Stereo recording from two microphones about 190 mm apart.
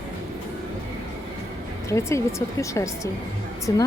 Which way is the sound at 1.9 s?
15° left (ahead or behind).